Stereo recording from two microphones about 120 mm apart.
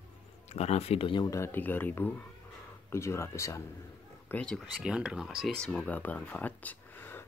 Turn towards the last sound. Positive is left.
turn(degrees=15)  # may be behind; listen again after turning